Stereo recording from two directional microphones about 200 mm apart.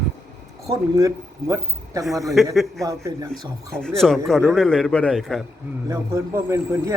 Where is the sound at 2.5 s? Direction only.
Centre (ahead or behind).